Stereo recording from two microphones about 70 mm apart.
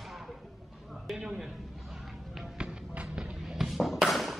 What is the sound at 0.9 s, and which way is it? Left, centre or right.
Chop, centre.